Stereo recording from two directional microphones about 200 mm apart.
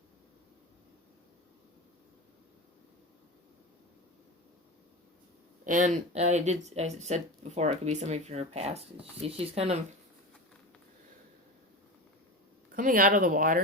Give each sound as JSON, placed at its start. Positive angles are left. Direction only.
{"t": 5.6, "sound": "speech", "side_deg": -40}
{"t": 12.7, "sound": "speech", "side_deg": -45}